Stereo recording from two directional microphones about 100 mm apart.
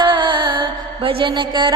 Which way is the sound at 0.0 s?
50° right (ahead or behind).